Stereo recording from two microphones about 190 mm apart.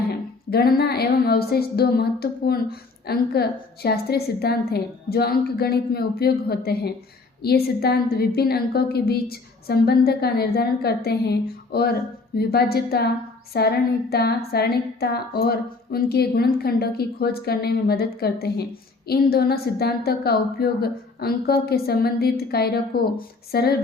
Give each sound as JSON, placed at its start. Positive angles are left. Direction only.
{"t": 0.5, "sound": "a woman's voice", "side_deg": 55}